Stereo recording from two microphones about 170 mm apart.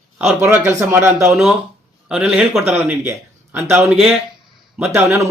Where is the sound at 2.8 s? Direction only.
15° right (ahead or behind).